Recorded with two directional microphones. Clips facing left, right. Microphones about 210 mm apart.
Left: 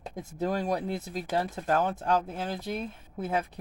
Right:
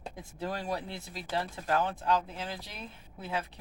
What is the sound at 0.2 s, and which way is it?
Speech, 45° left (ahead or behind).